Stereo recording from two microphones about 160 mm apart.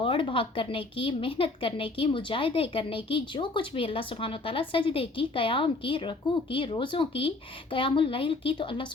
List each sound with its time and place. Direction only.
0.0 s a woman's voice: 30° left (ahead or behind)